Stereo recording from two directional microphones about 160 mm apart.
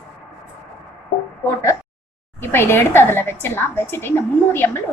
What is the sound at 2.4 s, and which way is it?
A woman's voice, 15° left (ahead or behind).